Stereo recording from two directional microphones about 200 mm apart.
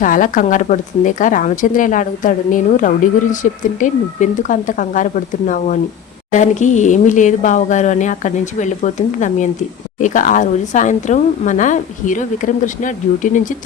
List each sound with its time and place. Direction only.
0.0 s a woman's voice: 40° left (ahead or behind)